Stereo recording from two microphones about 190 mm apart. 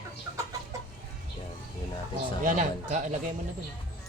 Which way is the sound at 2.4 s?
45° right (ahead or behind).